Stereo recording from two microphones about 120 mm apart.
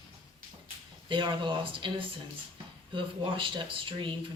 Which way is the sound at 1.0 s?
40° right (ahead or behind).